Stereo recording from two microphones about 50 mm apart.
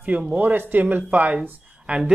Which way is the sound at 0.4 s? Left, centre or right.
Right.